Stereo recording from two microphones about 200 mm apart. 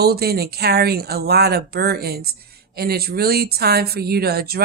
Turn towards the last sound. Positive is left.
turn(degrees=-50)  # may be behind; listen again after turning